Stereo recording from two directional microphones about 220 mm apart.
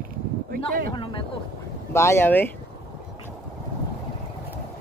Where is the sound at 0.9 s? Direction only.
20° left (ahead or behind).